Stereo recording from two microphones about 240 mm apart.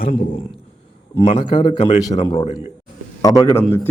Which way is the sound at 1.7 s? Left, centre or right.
Left.